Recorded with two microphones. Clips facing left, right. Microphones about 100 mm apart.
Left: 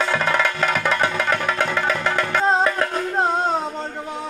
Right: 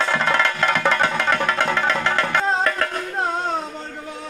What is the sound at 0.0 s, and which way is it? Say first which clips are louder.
Music: even; 5° left (ahead or behind).